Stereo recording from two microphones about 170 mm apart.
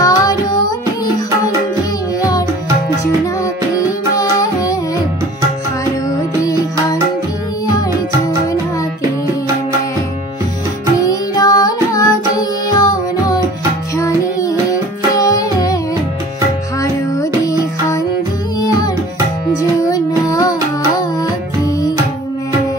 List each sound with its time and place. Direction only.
0.0 s music: 20° left (ahead or behind)
4.2 s music: 20° left (ahead or behind)
11.0 s music: 20° left (ahead or behind)
16.8 s music: 20° left (ahead or behind)